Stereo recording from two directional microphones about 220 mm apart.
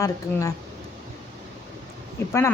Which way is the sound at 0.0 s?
15° left (ahead or behind).